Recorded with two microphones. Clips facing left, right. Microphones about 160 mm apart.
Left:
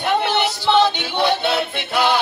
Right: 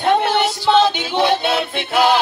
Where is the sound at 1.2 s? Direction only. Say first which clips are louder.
Right 2 dB; 20° right (ahead or behind).